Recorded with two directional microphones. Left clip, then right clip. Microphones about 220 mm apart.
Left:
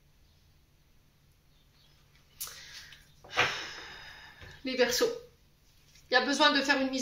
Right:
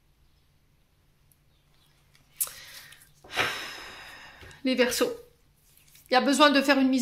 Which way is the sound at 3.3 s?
50° right (ahead or behind).